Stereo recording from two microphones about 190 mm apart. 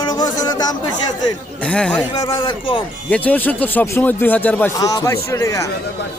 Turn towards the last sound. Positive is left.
turn(degrees=15)  # may be behind; listen again after turning